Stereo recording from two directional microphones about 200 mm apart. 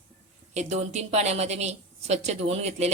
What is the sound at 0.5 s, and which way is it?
A woman's voice, 35° right (ahead or behind).